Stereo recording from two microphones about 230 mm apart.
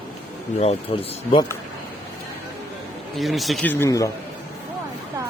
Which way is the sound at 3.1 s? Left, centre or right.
Centre.